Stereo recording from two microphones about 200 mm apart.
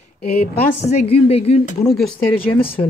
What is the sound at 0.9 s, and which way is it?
Speech, 30° left (ahead or behind).